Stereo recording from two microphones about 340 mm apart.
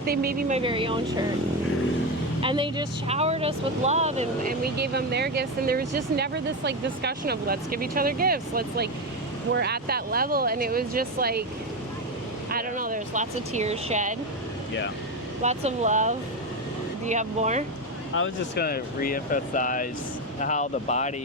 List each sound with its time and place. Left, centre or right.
0.0 s speech: right
2.4 s speech: centre
12.5 s a sound: right
15.4 s speech: centre
18.1 s speech: left